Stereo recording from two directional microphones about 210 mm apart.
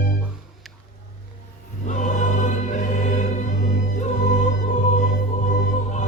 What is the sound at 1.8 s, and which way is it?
Choir, 35° left (ahead or behind).